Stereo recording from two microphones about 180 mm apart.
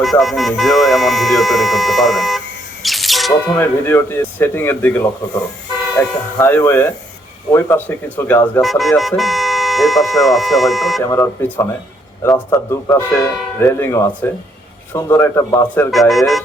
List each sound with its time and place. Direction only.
0.0 s speech: centre (ahead or behind)
2.8 s music: centre (ahead or behind)
3.5 s speech: 10° left (ahead or behind)
6.0 s speech: 10° left (ahead or behind)
8.6 s speech: centre (ahead or behind)
11.0 s speech: 15° left (ahead or behind)
15.9 s speech: centre (ahead or behind)